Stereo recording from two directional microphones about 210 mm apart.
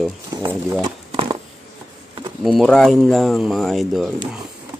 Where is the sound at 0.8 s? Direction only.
25° right (ahead or behind).